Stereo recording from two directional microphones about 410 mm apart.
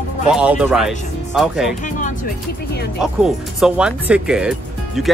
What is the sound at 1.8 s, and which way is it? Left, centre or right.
Speech, centre.